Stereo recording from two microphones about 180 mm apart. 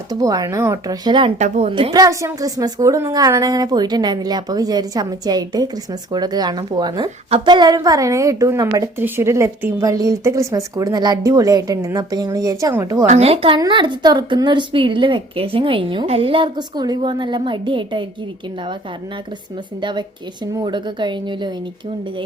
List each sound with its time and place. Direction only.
0.1 s a woman's voice: 20° right (ahead or behind)
1.4 s a woman's voice: 40° right (ahead or behind)
1.7 s a woman's voice: 25° right (ahead or behind)
13.1 s a woman's voice: 35° right (ahead or behind)
19.8 s a woman's voice: 25° right (ahead or behind)